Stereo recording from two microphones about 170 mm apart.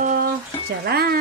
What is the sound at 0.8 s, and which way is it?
Speech, 65° right (ahead or behind).